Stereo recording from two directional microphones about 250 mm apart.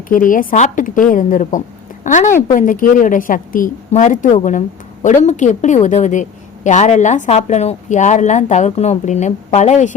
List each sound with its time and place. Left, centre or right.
0.1 s a woman's voice: left